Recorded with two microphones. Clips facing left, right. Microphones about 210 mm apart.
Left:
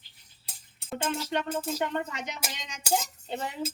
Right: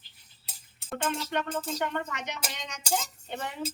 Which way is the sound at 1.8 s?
20° left (ahead or behind).